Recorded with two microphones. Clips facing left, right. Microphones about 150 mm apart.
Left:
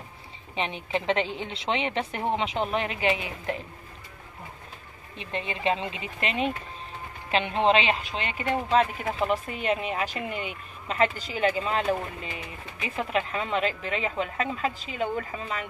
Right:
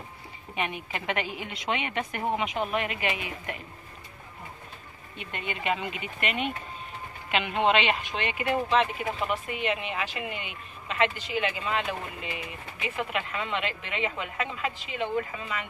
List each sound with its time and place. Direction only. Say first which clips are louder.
0.6 s a woman's voice: left 3 dB; 25° left (ahead or behind)
5.1 s a woman's voice: left 3 dB; 30° left (ahead or behind)